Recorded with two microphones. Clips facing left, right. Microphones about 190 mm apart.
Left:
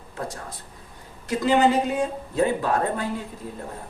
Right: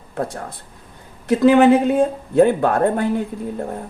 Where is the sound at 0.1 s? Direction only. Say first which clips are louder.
Right 8 dB; 60° right (ahead or behind).